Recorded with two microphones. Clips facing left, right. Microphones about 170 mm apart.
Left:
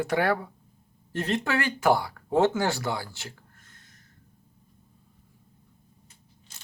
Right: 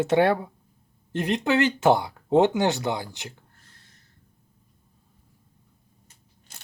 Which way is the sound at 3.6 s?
30° right (ahead or behind).